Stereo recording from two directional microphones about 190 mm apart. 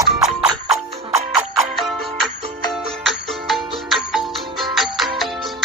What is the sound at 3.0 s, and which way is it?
Music, centre (ahead or behind).